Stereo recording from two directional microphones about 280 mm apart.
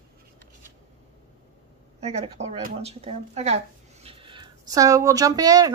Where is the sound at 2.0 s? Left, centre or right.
Right.